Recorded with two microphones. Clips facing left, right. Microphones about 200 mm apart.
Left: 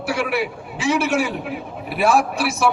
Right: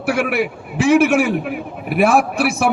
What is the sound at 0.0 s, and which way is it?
A man's voice, 55° right (ahead or behind).